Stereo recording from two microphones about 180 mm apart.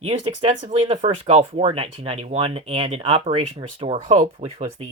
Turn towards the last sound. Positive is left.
turn(degrees=-40)  # may be behind; listen again after turning